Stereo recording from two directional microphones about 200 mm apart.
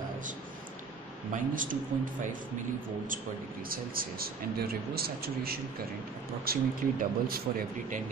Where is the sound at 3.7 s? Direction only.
45° right (ahead or behind).